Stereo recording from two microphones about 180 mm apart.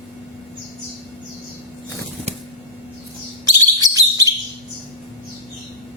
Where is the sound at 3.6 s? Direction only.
20° right (ahead or behind).